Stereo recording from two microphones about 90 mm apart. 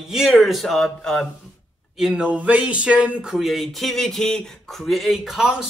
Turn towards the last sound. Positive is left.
turn(degrees=-5)  # may be behind; listen again after turning